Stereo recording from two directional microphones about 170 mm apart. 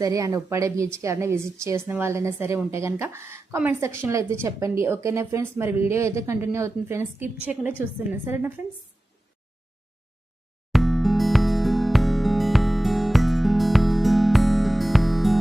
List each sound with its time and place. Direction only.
0.0 s a woman's voice: 20° right (ahead or behind)
10.7 s music: centre (ahead or behind)